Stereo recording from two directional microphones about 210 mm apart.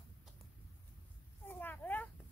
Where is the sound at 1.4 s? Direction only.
10° left (ahead or behind).